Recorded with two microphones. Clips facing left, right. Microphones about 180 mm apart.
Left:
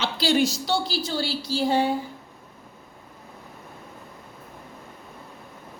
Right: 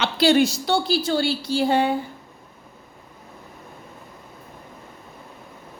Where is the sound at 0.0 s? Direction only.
65° right (ahead or behind).